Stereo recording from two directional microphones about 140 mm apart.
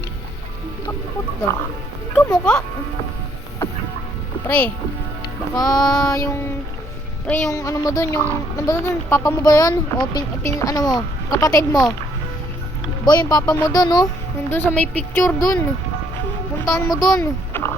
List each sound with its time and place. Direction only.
2.1 s speech: 5° left (ahead or behind)
4.4 s speech: 10° left (ahead or behind)
5.5 s speech: 30° left (ahead or behind)
7.3 s speech: 10° left (ahead or behind)
7.5 s speech: 25° left (ahead or behind)
13.1 s speech: 30° left (ahead or behind)
14.5 s speech: 15° left (ahead or behind)
16.6 s speech: 25° left (ahead or behind)